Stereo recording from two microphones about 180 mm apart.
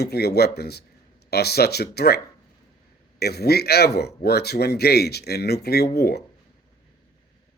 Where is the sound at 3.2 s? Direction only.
60° left (ahead or behind).